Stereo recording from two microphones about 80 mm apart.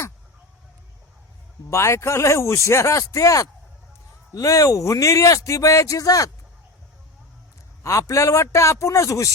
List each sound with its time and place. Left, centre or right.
1.7 s a man's voice: left
7.9 s a man's voice: left